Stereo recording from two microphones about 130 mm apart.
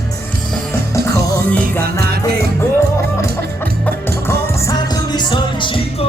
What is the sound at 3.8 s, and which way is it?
Music, 20° left (ahead or behind).